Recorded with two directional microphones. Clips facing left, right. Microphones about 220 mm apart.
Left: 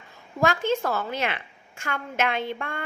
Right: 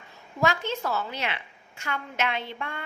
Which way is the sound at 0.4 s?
50° left (ahead or behind).